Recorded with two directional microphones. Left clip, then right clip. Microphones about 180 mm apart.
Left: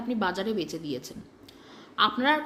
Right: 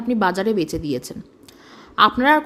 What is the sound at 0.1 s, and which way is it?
A woman's voice, 50° right (ahead or behind).